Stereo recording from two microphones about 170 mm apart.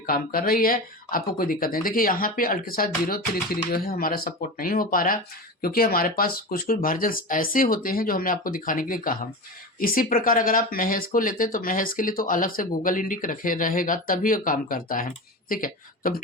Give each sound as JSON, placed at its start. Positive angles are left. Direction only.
{"t": 0.0, "sound": "speech", "side_deg": 60}